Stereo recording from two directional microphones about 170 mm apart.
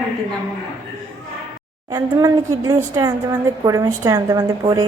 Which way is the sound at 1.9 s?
20° right (ahead or behind).